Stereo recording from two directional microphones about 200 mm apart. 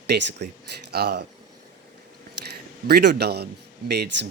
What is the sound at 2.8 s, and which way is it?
Speech, 55° right (ahead or behind).